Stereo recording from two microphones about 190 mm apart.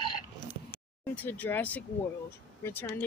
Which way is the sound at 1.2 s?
10° left (ahead or behind).